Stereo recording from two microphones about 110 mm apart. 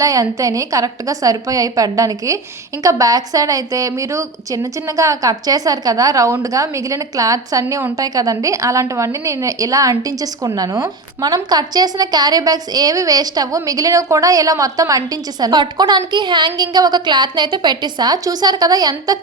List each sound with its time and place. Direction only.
0.0 s a woman's voice: 30° right (ahead or behind)
7.6 s a woman's voice: 20° right (ahead or behind); by 19.2 s 35° right (ahead or behind)